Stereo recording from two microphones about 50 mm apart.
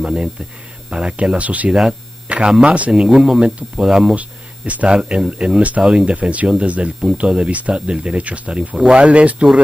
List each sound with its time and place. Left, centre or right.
0.0 s speech: centre
1.9 s a sound: right
2.6 s speech: right
2.9 s speech: centre
4.1 s speech: right
4.9 s speech: centre
6.1 s speech: right